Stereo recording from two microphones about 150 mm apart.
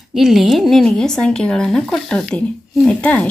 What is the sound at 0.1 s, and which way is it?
Speech, centre (ahead or behind).